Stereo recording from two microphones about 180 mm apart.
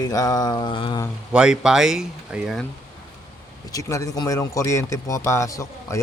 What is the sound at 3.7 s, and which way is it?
Speech, 20° left (ahead or behind).